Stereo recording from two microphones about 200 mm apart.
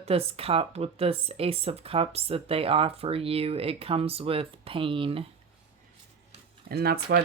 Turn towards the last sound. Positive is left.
turn(degrees=-50)  # may be behind; listen again after turning